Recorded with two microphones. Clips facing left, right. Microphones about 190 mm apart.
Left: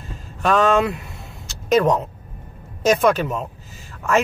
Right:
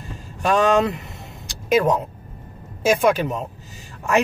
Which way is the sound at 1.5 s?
10° right (ahead or behind).